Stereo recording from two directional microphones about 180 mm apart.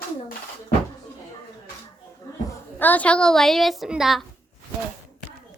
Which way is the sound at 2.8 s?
10° left (ahead or behind).